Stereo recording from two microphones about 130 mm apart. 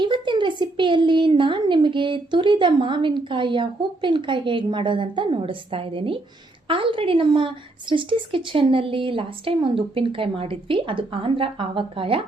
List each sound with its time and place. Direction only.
0.0 s a woman's voice: 40° right (ahead or behind)